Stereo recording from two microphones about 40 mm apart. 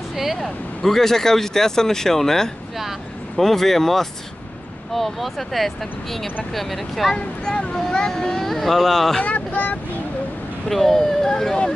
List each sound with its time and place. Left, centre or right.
0.1 s vehicle: centre
0.4 s speech: centre
7.2 s a child's voice: left
9.2 s speech: left
10.7 s speech: centre